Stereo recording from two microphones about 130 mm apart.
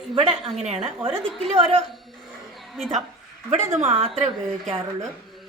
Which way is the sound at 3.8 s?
55° right (ahead or behind).